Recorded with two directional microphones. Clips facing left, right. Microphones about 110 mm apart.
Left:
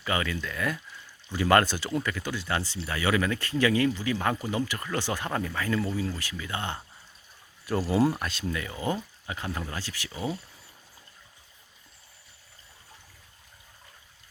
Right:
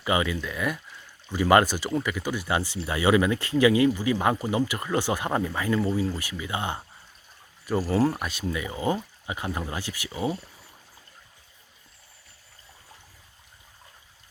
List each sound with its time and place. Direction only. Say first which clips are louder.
0.0 s speech: right 4 dB; 15° right (ahead or behind)
7.7 s speech: right 1 dB; centre (ahead or behind)